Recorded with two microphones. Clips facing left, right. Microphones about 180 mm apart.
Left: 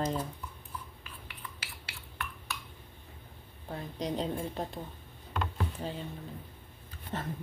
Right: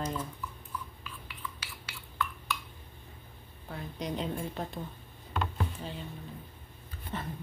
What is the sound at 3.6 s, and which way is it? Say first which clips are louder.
Speech: left 2 dB; 35° left (ahead or behind).